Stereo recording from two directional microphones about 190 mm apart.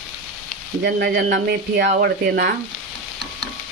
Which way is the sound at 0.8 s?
55° right (ahead or behind).